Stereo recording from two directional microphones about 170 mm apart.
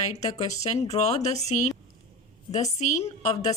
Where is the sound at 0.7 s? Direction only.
40° left (ahead or behind).